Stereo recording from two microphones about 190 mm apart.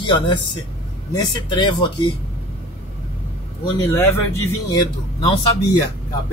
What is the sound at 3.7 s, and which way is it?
Speech, 15° left (ahead or behind).